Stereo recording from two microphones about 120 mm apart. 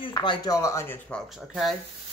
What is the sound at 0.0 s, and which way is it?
Speech, 40° left (ahead or behind).